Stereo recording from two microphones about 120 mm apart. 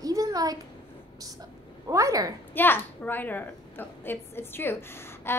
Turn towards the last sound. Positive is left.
turn(degrees=20)  # may be behind; listen again after turning